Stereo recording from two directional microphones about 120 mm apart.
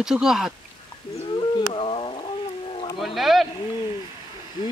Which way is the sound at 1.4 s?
50° left (ahead or behind).